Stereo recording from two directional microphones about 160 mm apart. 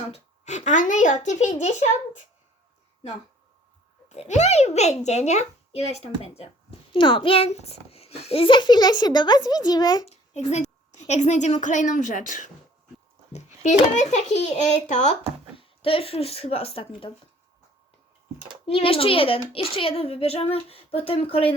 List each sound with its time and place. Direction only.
0.1 s a child's voice: 45° left (ahead or behind)
4.1 s a child's voice: 45° left (ahead or behind); by 10.1 s 25° left (ahead or behind)
10.1 s a woman's voice: 45° left (ahead or behind)
13.3 s a sound: 45° left (ahead or behind)
13.9 s a child's voice: 45° left (ahead or behind)
18.6 s a child's voice: 35° left (ahead or behind)